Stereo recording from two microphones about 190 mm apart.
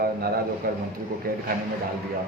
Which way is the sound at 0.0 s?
55° right (ahead or behind).